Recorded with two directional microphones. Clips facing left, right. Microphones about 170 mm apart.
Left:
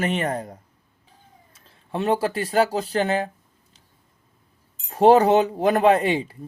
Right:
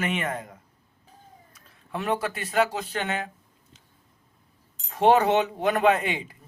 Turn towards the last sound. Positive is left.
turn(degrees=35)  # may be behind; listen again after turning